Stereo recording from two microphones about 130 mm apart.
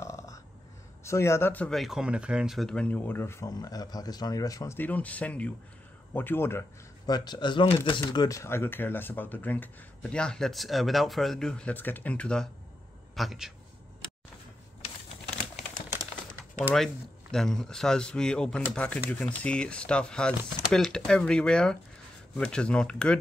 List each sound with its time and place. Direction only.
0.0 s a sound: 25° left (ahead or behind)
1.0 s speech: 20° left (ahead or behind)
1.8 s speech: 5° right (ahead or behind); by 4.7 s 25° left (ahead or behind)
4.7 s speech: 10° left (ahead or behind)
7.1 s a man's voice: 35° left (ahead or behind); by 13.5 s centre (ahead or behind)
16.7 s speech: centre (ahead or behind)